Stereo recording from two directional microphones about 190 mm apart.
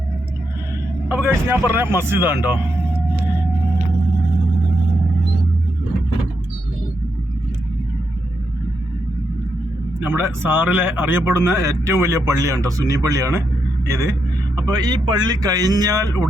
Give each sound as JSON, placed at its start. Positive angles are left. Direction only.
{"t": 1.0, "sound": "speech", "side_deg": -10}
{"t": 10.0, "sound": "speech", "side_deg": -10}